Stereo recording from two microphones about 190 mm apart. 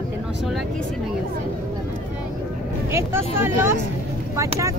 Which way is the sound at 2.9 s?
10° right (ahead or behind).